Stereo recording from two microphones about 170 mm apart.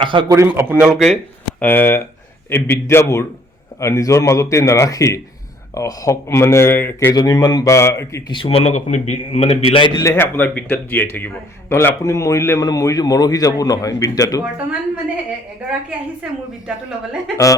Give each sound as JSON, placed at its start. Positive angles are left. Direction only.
{"t": 0.0, "sound": "a man's voice", "side_deg": -30}
{"t": 0.3, "sound": "a man's voice", "side_deg": -15}
{"t": 1.1, "sound": "speech", "side_deg": 10}
{"t": 8.3, "sound": "a man's voice", "side_deg": 30}
{"t": 10.1, "sound": "a man's voice", "side_deg": 10}
{"t": 16.2, "sound": "speech", "side_deg": -5}